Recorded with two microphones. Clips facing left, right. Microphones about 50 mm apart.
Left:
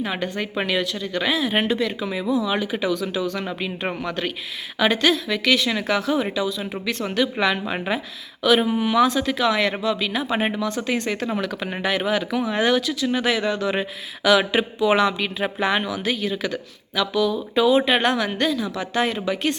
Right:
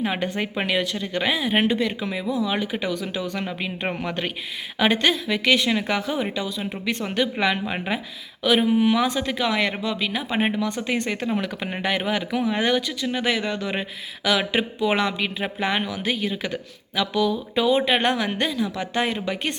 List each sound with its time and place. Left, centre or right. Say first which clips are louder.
0.0 s speech: right 1 dB; right
4.8 s speech: left 1 dB; centre